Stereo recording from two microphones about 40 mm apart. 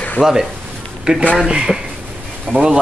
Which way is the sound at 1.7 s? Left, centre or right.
Centre.